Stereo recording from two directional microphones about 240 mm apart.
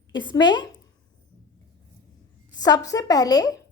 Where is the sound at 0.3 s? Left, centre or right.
Centre.